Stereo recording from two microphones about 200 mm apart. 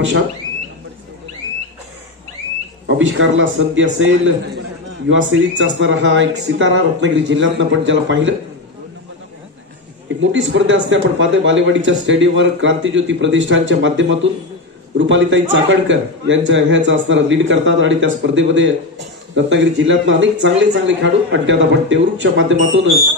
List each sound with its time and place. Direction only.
2.9 s speech: 65° right (ahead or behind)
10.3 s speech: 70° right (ahead or behind)